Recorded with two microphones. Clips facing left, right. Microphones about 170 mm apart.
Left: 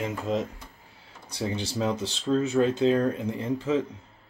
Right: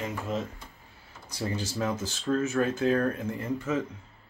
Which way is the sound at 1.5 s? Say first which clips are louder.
Left 2 dB; 70° left (ahead or behind).